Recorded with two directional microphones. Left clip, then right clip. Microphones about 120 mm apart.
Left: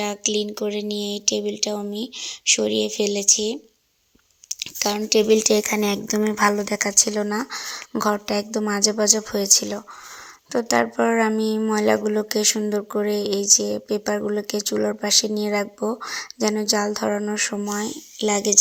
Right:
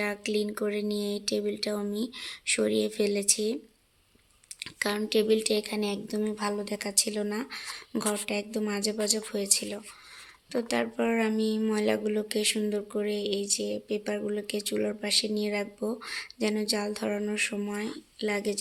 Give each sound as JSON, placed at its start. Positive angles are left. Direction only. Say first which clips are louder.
{"t": 0.0, "sound": "speech", "louder": "left 6 dB", "side_deg": 30}
{"t": 4.4, "sound": "a sound", "louder": "left 7 dB", "side_deg": 25}
{"t": 4.9, "sound": "speech", "louder": "left 8 dB", "side_deg": 35}
{"t": 5.3, "sound": "speech", "louder": "left 9 dB", "side_deg": 50}
{"t": 6.6, "sound": "speech", "louder": "left 10 dB", "side_deg": 40}
{"t": 17.1, "sound": "a sound", "louder": "left 6 dB", "side_deg": 10}
{"t": 17.7, "sound": "speech", "louder": "left 8 dB", "side_deg": 40}